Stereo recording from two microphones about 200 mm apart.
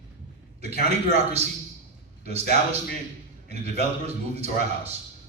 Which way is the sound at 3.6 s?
30° right (ahead or behind).